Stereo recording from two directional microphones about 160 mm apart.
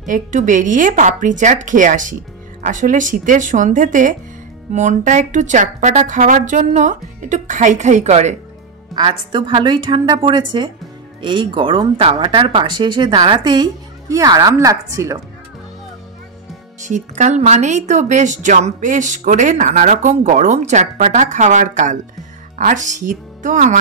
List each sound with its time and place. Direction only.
0.0 s speech: 50° right (ahead or behind)
8.9 s speech: 30° right (ahead or behind)
16.8 s speech: 50° right (ahead or behind)